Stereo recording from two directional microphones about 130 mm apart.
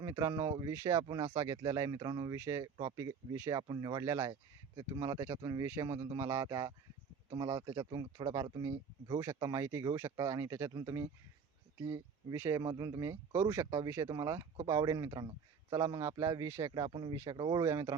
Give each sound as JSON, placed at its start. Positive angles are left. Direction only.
{"t": 0.0, "sound": "speech", "side_deg": -25}
{"t": 3.6, "sound": "speech", "side_deg": -35}
{"t": 7.8, "sound": "speech", "side_deg": -35}